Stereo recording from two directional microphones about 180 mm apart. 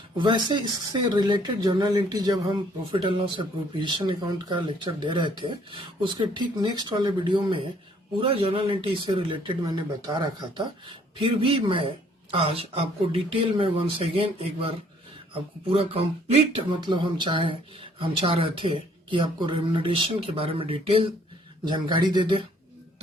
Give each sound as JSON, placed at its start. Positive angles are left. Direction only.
{"t": 0.2, "sound": "speech", "side_deg": -25}